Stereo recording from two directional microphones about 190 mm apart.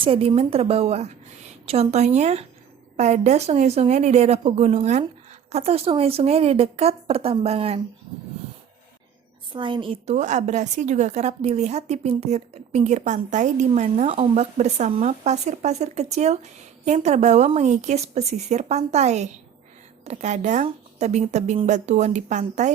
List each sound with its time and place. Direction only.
0.0 s a woman's voice: 30° right (ahead or behind)
9.5 s a woman's voice: 25° right (ahead or behind)